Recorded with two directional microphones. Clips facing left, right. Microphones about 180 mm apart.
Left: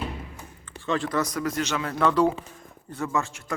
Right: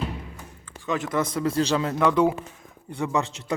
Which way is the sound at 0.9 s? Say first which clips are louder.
Even; 20° right (ahead or behind).